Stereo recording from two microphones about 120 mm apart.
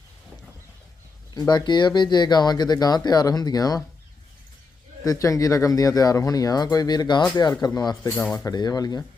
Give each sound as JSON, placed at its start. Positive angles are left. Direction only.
{"t": 1.3, "sound": "speech", "side_deg": 35}
{"t": 5.0, "sound": "speech", "side_deg": 30}
{"t": 8.0, "sound": "speech", "side_deg": 20}
{"t": 8.5, "sound": "speech", "side_deg": 35}